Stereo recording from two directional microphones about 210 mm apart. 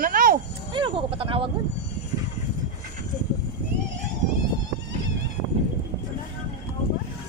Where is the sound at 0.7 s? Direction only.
25° right (ahead or behind).